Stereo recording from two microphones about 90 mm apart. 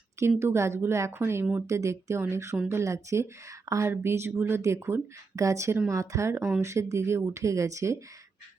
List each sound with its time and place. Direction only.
0.2 s speech: 30° right (ahead or behind)